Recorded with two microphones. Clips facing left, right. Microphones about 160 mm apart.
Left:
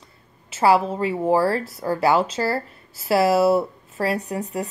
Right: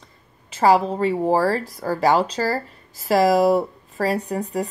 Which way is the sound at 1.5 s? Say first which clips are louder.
Even; 35° right (ahead or behind).